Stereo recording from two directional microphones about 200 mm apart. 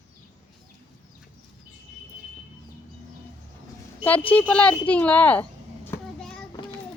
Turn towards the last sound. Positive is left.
turn(degrees=10)  # may be behind; listen again after turning